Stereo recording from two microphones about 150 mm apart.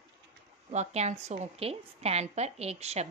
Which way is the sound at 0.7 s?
50° right (ahead or behind).